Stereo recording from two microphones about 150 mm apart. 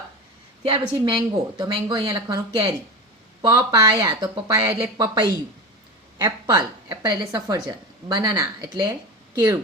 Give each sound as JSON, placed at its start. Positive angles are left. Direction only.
{"t": 0.6, "sound": "a woman's voice", "side_deg": -35}
{"t": 4.9, "sound": "a woman's voice", "side_deg": -30}